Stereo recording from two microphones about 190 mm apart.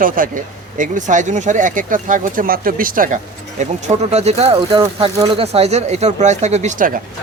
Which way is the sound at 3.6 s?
35° right (ahead or behind).